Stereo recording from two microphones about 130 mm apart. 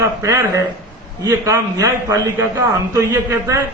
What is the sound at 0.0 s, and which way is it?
A man's voice, 25° right (ahead or behind).